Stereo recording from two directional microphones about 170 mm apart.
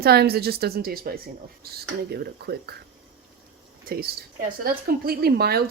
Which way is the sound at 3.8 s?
60° right (ahead or behind).